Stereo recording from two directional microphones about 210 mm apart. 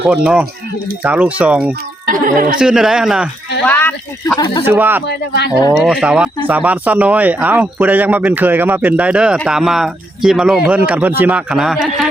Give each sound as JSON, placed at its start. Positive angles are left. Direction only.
{"t": 0.1, "sound": "a man's voice", "side_deg": -5}
{"t": 2.1, "sound": "speech", "side_deg": -40}
{"t": 2.6, "sound": "a man's voice", "side_deg": -5}
{"t": 3.6, "sound": "a man's voice", "side_deg": 10}
{"t": 4.6, "sound": "speech", "side_deg": -10}
{"t": 5.0, "sound": "speech", "side_deg": 55}
{"t": 5.7, "sound": "speech", "side_deg": 0}